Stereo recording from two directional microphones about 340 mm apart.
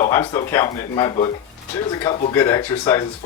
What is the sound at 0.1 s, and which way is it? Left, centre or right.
Speech, centre.